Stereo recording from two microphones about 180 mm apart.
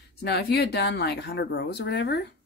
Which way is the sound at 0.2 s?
65° left (ahead or behind).